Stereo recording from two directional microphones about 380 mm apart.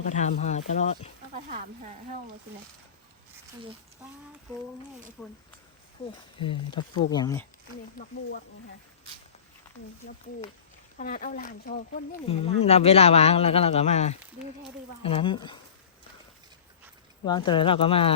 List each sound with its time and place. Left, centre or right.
0.1 s speech: centre
1.3 s speech: right
6.4 s speech: centre
10.9 s speech: left
17.2 s speech: centre